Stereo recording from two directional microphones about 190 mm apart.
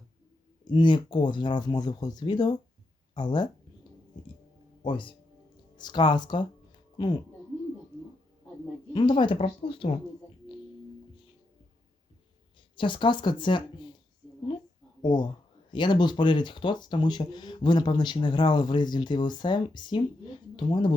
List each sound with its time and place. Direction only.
0.6 s speech: 25° left (ahead or behind)
4.8 s speech: 25° left (ahead or behind)
8.9 s speech: 25° left (ahead or behind)
12.7 s speech: 25° left (ahead or behind)
15.0 s speech: 25° left (ahead or behind)